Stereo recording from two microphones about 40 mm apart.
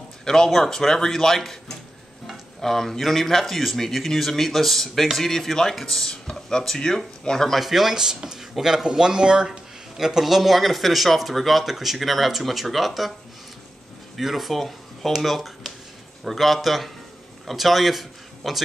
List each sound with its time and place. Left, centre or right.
0.2 s speech: centre
7.5 s speech: centre
7.9 s speech: centre
9.5 s a sound: centre
10.2 s speech: centre
14.1 s speech: centre